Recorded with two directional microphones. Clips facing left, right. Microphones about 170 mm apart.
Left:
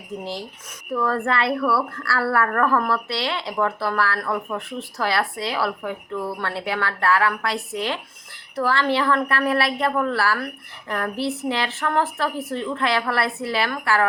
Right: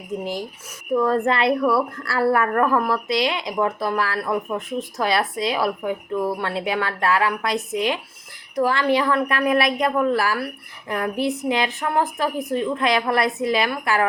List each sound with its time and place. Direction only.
0.9 s a woman's voice: 20° right (ahead or behind)